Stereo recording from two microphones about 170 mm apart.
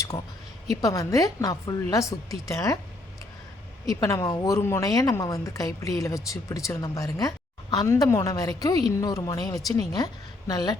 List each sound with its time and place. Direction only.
0.7 s speech: 20° left (ahead or behind)
3.8 s speech: 20° left (ahead or behind)